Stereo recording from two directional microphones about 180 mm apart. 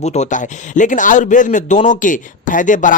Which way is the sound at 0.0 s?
40° left (ahead or behind).